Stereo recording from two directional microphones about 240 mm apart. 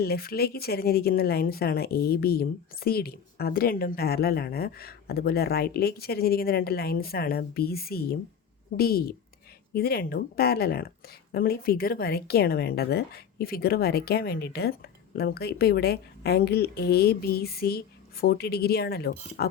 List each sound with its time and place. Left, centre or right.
0.0 s speech: left